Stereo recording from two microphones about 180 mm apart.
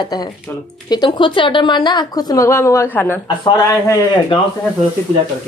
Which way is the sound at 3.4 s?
20° left (ahead or behind).